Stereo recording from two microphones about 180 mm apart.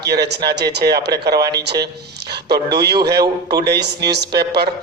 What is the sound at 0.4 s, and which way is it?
A man's voice, 65° right (ahead or behind).